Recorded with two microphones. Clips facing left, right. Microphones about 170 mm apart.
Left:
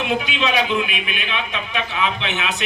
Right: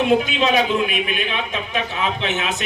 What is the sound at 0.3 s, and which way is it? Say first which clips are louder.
A man's voice: right 2 dB; 45° right (ahead or behind).